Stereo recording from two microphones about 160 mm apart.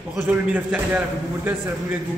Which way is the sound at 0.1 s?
5° right (ahead or behind).